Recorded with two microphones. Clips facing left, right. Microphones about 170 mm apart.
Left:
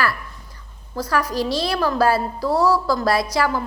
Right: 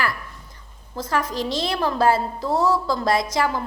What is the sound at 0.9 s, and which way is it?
A woman's voice, 25° right (ahead or behind).